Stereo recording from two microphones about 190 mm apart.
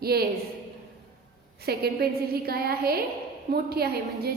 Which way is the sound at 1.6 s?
55° right (ahead or behind).